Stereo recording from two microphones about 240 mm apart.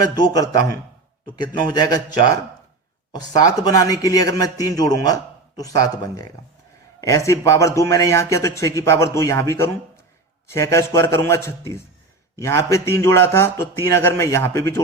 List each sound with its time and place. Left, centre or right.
0.2 s a man's voice: centre